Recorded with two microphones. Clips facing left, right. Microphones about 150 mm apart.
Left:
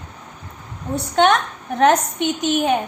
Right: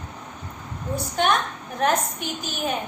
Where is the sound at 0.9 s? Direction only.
80° left.